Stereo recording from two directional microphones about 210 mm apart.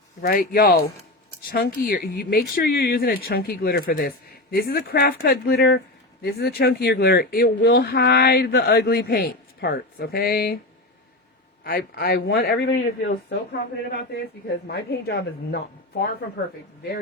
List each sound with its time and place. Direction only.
0.2 s a man's voice: 45° left (ahead or behind)
11.6 s a man's voice: 45° left (ahead or behind)